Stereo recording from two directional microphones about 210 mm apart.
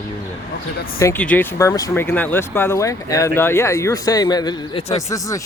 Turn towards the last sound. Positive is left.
turn(degrees=15)  # may be behind; listen again after turning